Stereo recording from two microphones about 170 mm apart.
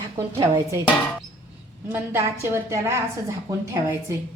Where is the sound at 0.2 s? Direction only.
20° right (ahead or behind).